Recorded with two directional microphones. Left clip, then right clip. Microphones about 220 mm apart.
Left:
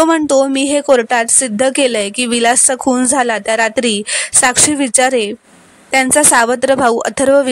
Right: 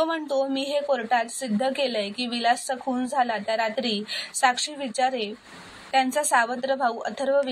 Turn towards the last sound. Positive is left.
turn(degrees=55)  # may be behind; listen again after turning